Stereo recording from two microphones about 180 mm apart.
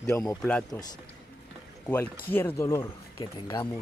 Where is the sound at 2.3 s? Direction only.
10° left (ahead or behind).